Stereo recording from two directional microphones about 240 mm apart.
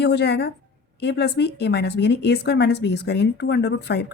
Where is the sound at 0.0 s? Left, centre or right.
Left.